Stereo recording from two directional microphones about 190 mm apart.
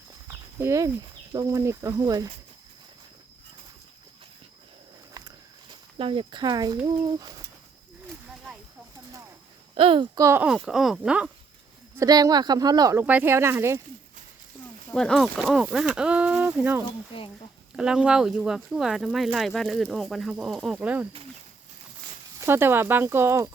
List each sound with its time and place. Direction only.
0.3 s horse: 15° right (ahead or behind)
1.3 s speech: 15° right (ahead or behind)
6.0 s speech: 25° right (ahead or behind)
9.7 s speech: 30° right (ahead or behind)
10.4 s speech: 5° right (ahead or behind)
11.9 s speech: 20° right (ahead or behind)
14.9 s speech: centre (ahead or behind)
17.1 s speech: 30° left (ahead or behind)
17.7 s speech: 5° right (ahead or behind)
22.4 s speech: 10° right (ahead or behind)